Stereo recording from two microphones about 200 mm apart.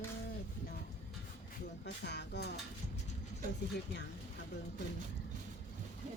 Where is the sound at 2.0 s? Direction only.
55° left (ahead or behind).